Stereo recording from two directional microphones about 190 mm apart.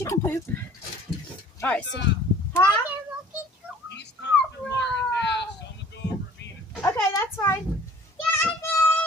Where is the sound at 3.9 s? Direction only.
65° left (ahead or behind).